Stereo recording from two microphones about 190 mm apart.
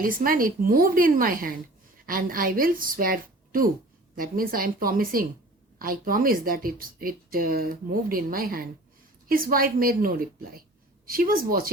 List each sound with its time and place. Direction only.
0.0 s speech: 50° right (ahead or behind)